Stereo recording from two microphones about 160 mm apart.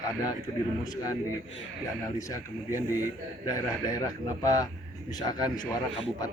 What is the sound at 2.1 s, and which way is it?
A man's voice, 20° left (ahead or behind).